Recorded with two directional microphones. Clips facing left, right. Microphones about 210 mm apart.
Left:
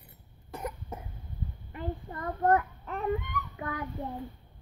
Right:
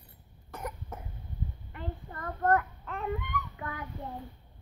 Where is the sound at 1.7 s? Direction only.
15° left (ahead or behind).